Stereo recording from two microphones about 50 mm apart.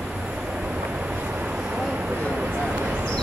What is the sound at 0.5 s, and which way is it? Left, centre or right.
Vehicle, centre.